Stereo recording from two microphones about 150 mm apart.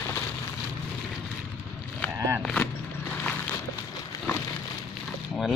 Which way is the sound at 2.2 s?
20° right (ahead or behind).